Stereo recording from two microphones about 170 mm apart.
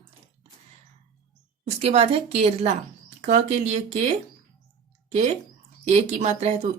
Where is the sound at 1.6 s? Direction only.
35° right (ahead or behind).